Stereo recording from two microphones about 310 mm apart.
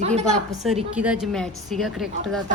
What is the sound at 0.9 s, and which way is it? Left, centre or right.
A woman's voice, centre.